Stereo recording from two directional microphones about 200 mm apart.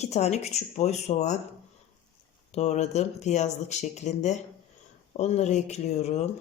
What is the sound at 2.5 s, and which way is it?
Speech, 35° left (ahead or behind).